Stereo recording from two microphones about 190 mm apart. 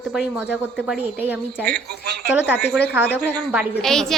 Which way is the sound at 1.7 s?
55° right (ahead or behind).